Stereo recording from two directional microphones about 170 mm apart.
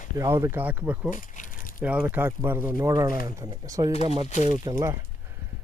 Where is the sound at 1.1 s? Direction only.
50° left (ahead or behind).